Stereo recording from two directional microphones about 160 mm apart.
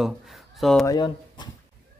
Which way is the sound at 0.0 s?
Centre (ahead or behind).